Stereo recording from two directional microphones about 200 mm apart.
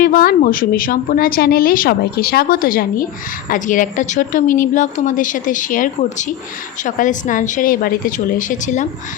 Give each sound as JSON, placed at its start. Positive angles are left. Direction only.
{"t": 0.0, "sound": "a woman's voice", "side_deg": 45}